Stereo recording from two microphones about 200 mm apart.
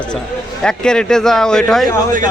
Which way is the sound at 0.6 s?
5° left (ahead or behind).